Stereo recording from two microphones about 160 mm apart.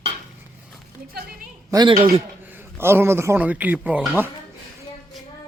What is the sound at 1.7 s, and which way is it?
Speech, 25° right (ahead or behind).